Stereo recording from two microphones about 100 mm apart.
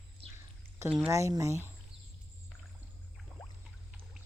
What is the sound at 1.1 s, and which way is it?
Speech, 30° right (ahead or behind).